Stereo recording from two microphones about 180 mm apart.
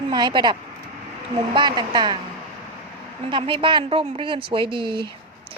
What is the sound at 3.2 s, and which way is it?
A woman's voice, 30° right (ahead or behind).